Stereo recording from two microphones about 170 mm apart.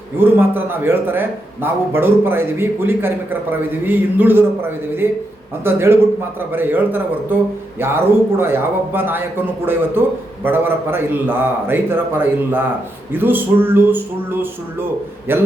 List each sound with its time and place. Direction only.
0.2 s a man's voice: 10° right (ahead or behind)
5.6 s a man's voice: 15° right (ahead or behind)
10.4 s a man's voice: 10° right (ahead or behind)